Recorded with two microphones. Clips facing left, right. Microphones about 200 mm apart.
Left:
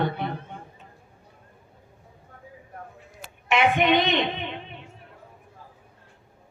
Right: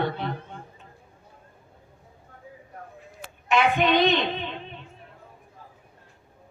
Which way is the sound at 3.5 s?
20° left (ahead or behind).